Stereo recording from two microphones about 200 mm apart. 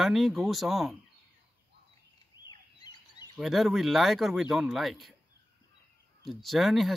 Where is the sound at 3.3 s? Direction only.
Centre (ahead or behind).